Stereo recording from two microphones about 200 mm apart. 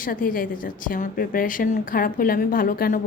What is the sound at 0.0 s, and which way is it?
A woman's voice, 45° left (ahead or behind).